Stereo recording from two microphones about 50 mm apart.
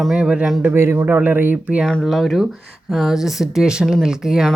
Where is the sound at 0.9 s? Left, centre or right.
Right.